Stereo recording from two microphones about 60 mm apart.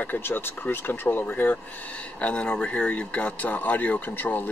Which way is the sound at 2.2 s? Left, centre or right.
Centre.